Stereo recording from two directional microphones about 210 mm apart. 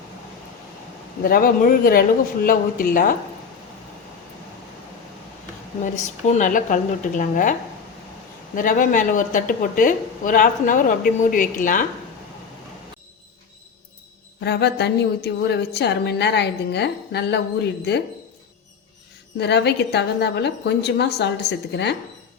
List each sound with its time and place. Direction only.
1.2 s a woman's voice: 45° left (ahead or behind)
5.8 s a woman's voice: 35° left (ahead or behind)
8.5 s a woman's voice: 40° left (ahead or behind)
14.4 s a woman's voice: 50° left (ahead or behind)
19.4 s a woman's voice: 55° left (ahead or behind)